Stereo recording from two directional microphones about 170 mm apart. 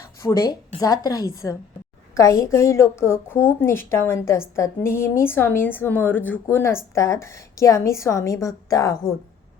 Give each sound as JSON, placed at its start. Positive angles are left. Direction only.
{"t": 0.2, "sound": "a woman's voice", "side_deg": 20}